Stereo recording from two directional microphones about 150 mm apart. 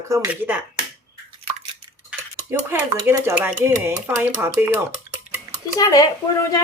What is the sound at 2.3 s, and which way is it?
Speech, 15° right (ahead or behind).